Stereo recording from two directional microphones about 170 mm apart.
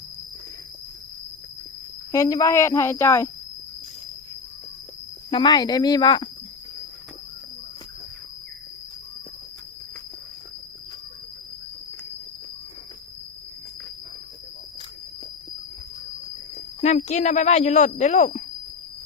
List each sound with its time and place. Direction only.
2.1 s speech: 20° left (ahead or behind)
5.3 s speech: 25° left (ahead or behind)
16.8 s speech: 40° left (ahead or behind)